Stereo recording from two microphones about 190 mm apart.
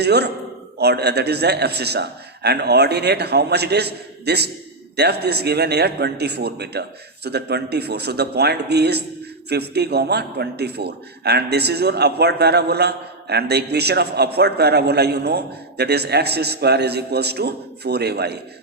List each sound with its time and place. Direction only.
0.0 s a man's voice: 60° right (ahead or behind)